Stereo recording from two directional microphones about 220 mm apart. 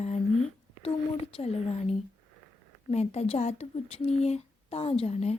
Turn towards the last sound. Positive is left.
turn(degrees=30)  # may be behind; listen again after turning